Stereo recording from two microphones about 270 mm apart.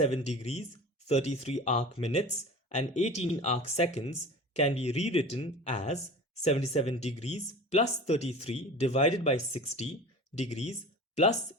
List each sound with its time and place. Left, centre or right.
0.0 s speech: left